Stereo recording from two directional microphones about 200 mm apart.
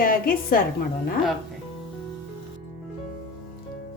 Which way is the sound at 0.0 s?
45° left (ahead or behind).